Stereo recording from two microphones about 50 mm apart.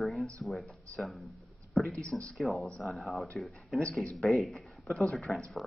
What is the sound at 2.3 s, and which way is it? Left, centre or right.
Speech, centre.